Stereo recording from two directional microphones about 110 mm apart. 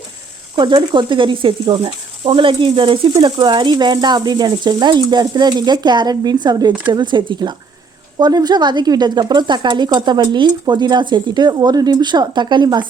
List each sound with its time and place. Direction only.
0.6 s speech: 45° right (ahead or behind)
3.2 s speech: 40° right (ahead or behind)